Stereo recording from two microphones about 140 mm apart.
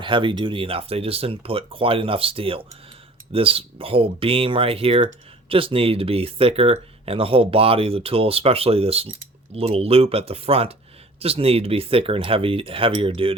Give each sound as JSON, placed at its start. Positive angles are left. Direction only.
{"t": 0.0, "sound": "speech", "side_deg": -35}